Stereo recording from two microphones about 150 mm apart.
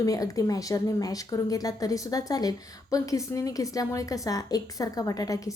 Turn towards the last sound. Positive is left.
turn(degrees=20)  # may be behind; listen again after turning